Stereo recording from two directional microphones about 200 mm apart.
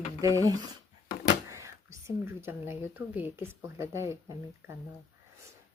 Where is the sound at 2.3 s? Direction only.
10° right (ahead or behind).